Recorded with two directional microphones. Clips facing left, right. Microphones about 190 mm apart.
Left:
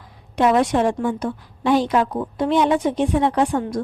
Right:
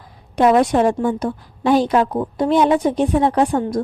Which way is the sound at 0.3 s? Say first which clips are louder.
Right 3 dB; 40° right (ahead or behind).